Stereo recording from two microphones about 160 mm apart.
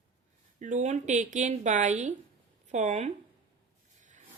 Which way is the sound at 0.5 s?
50° right (ahead or behind).